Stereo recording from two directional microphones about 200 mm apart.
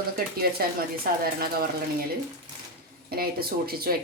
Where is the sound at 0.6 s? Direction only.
50° right (ahead or behind).